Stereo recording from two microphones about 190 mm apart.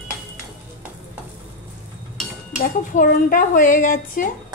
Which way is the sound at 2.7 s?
45° left (ahead or behind).